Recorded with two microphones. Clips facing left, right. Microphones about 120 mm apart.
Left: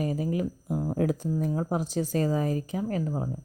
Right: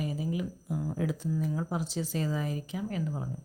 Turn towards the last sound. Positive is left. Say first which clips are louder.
# left 5 dB
turn(degrees=35)  # may be behind; listen again after turning